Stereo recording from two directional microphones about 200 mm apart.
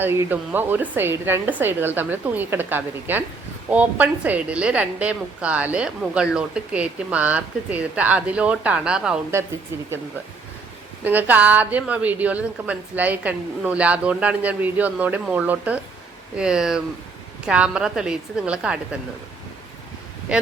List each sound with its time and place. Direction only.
0.0 s a woman's voice: 10° right (ahead or behind)
11.0 s a woman's voice: 10° right (ahead or behind)